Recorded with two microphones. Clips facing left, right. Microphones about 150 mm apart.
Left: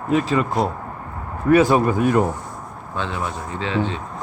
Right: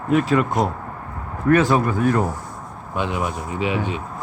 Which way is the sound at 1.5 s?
15° left (ahead or behind).